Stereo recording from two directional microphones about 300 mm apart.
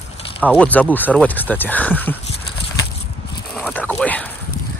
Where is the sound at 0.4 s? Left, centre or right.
Centre.